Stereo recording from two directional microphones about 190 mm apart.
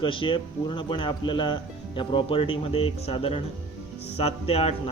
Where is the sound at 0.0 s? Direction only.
25° left (ahead or behind).